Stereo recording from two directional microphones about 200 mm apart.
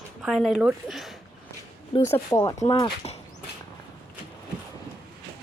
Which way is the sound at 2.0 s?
15° left (ahead or behind).